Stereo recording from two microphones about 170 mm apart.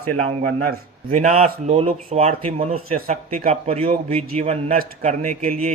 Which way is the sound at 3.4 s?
40° right (ahead or behind).